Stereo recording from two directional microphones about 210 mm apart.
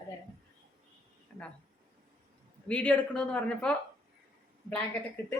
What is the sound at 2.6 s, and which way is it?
Speech, 5° left (ahead or behind).